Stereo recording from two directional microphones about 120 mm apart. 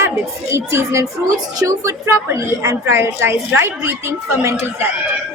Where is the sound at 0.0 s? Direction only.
25° right (ahead or behind).